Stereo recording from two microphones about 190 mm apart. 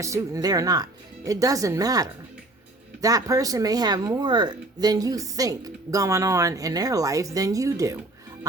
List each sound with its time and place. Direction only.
0.0 s speech: 15° right (ahead or behind)